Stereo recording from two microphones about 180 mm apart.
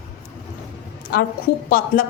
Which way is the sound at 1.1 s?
55° left (ahead or behind).